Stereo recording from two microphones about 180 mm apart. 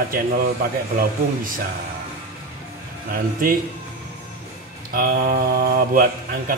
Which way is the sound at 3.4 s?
50° right (ahead or behind).